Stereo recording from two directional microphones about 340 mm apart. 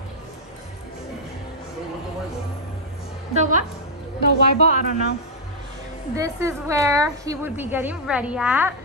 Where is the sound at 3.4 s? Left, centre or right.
Right.